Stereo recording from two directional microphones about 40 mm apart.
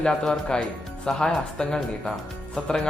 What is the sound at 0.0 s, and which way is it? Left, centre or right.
Speech, left.